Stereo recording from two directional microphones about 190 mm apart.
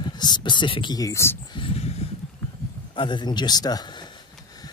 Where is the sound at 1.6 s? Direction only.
35° left (ahead or behind).